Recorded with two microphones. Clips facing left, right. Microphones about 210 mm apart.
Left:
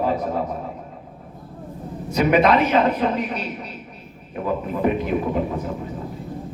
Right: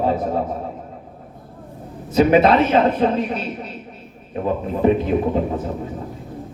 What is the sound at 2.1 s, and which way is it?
A man's voice, 25° right (ahead or behind).